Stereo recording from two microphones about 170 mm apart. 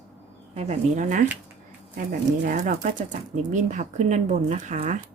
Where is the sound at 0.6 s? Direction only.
45° right (ahead or behind).